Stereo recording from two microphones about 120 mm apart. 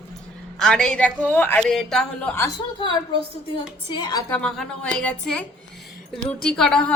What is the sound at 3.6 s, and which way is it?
Speech, 40° left (ahead or behind).